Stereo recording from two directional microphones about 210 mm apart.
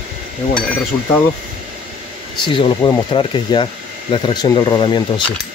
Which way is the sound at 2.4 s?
20° left (ahead or behind).